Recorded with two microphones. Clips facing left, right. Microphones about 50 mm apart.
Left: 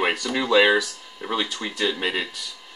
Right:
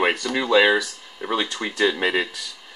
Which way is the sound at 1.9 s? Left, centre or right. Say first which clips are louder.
Right 4 dB; right.